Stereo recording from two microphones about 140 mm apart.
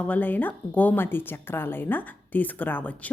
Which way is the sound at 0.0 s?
10° left (ahead or behind).